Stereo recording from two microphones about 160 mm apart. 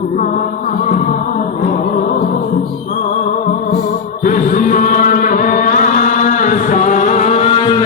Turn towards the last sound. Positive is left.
turn(degrees=30)  # may be behind; listen again after turning